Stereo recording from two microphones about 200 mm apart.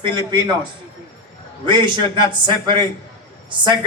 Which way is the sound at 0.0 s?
25° right (ahead or behind).